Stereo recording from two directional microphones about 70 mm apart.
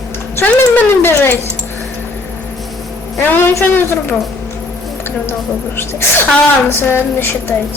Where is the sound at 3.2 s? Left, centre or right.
Left.